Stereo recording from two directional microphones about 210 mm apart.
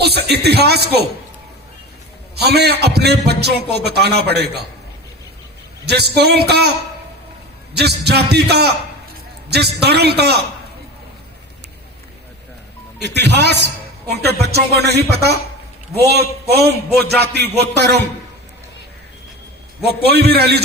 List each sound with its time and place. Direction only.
0.0 s speech: 50° right (ahead or behind)
2.3 s a man's voice: 50° right (ahead or behind)
5.8 s a man's voice: 50° right (ahead or behind)
13.0 s a man's voice: 55° right (ahead or behind)
19.8 s a man's voice: 50° right (ahead or behind)